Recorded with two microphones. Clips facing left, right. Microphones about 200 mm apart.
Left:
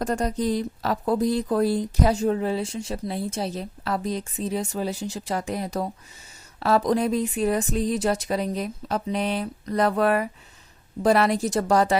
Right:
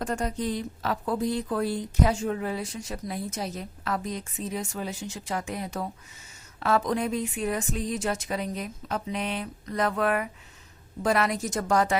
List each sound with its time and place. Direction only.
0.0 s speech: 40° left (ahead or behind)